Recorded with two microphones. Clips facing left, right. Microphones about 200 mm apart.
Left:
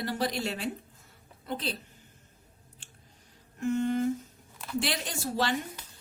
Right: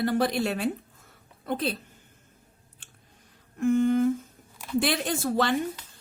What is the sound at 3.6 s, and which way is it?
Humming, 55° right (ahead or behind).